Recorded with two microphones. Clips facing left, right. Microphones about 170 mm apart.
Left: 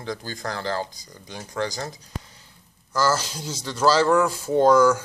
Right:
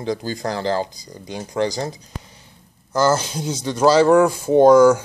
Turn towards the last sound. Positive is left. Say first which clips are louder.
# right 6 dB
turn(degrees=-15)  # may be behind; listen again after turning